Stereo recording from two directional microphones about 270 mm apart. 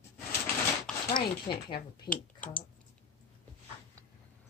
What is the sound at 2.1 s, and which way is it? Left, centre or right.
Speech, centre.